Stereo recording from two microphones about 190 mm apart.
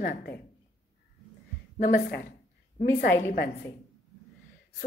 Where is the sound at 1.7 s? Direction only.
45° left (ahead or behind).